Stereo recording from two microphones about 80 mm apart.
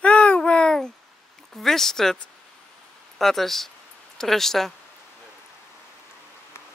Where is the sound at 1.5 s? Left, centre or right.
Centre.